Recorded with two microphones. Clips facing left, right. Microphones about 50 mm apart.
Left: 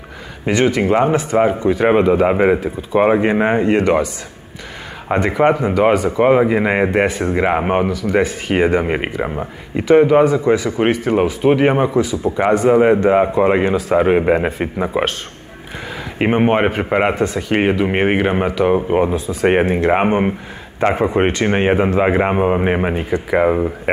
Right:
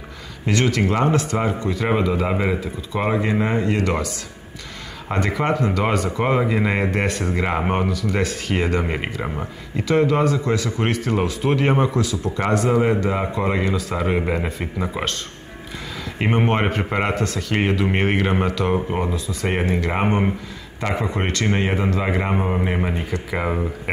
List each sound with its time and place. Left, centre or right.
0.5 s speech: left
1.6 s speech: left; by 7.3 s centre
7.3 s speech: left
9.2 s speech: centre
12.7 s speech: left
16.2 s speech: centre
19.1 s speech: left
20.1 s speech: left
20.8 s speech: left
21.3 s speech: left
21.5 s speech: left
22.9 s speech: left